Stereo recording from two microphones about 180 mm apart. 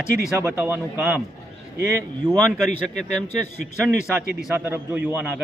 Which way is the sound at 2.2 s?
5° right (ahead or behind).